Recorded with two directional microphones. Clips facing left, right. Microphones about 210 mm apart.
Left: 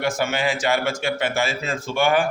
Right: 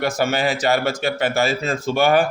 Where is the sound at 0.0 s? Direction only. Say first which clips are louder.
Right 2 dB; 35° right (ahead or behind).